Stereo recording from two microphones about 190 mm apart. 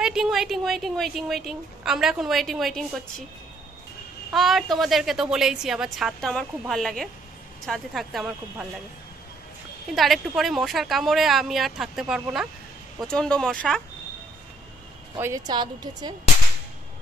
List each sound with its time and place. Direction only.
0.0 s speech: 5° right (ahead or behind)
4.3 s speech: centre (ahead or behind)
9.9 s speech: centre (ahead or behind)
15.1 s a woman's voice: 15° right (ahead or behind)